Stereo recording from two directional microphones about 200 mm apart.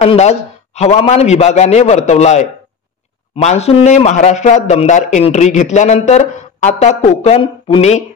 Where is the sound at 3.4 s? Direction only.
30° left (ahead or behind).